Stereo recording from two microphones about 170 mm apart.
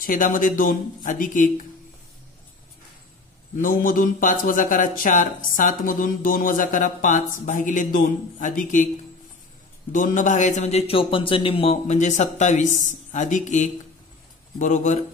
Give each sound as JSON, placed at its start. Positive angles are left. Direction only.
{"t": 0.0, "sound": "a man's voice", "side_deg": 55}
{"t": 3.6, "sound": "a man's voice", "side_deg": 50}
{"t": 9.9, "sound": "a man's voice", "side_deg": 50}